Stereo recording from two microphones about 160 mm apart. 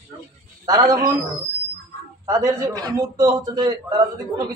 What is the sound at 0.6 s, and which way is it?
Speech, 25° right (ahead or behind).